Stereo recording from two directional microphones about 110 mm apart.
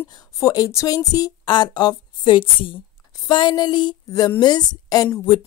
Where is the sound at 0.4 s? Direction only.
30° left (ahead or behind); by 2.8 s 50° left (ahead or behind).